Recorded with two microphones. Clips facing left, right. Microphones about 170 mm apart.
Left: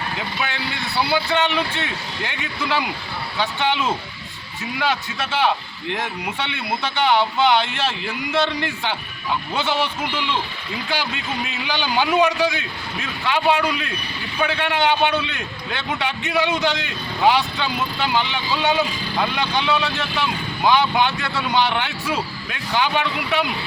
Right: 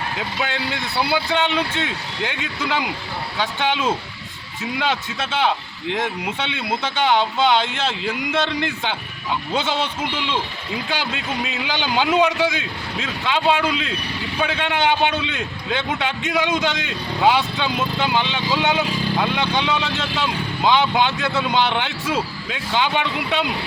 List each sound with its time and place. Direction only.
1.1 s speech: 15° right (ahead or behind)
11.6 s speech: 20° right (ahead or behind)